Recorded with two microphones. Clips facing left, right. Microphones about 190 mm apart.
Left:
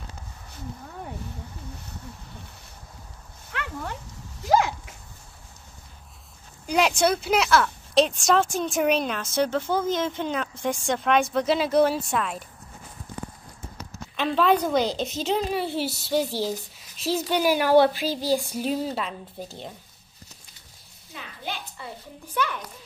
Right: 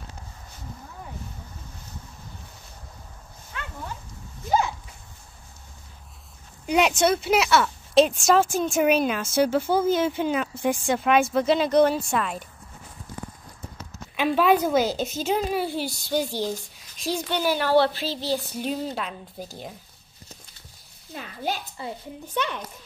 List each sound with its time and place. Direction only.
3.5 s dog: 70° left (ahead or behind)
4.5 s dog: 90° left
6.6 s speech: centre (ahead or behind)
14.1 s speech: 10° right (ahead or behind)
21.1 s a sound: 40° right (ahead or behind)
21.8 s a child's voice: 25° right (ahead or behind)